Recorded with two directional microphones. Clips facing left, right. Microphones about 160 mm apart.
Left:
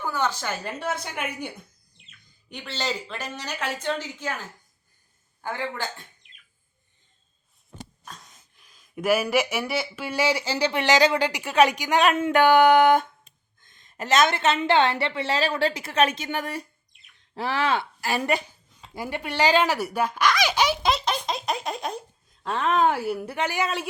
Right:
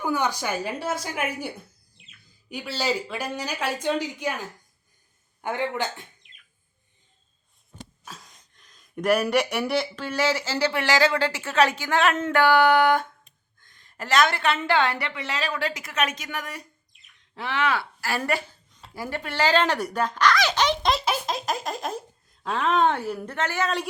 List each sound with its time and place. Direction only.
0.0 s speech: 15° right (ahead or behind)
5.4 s speech: 20° right (ahead or behind)
6.3 s a sound: centre (ahead or behind)
8.0 s a woman's voice: centre (ahead or behind); by 17.7 s 35° left (ahead or behind)
17.7 s a woman's voice: 20° left (ahead or behind)
19.6 s baby laughter: 5° left (ahead or behind)